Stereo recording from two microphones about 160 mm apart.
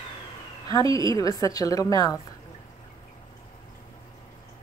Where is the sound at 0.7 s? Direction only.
20° left (ahead or behind).